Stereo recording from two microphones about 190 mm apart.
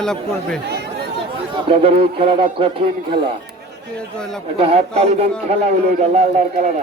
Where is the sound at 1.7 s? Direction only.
30° right (ahead or behind).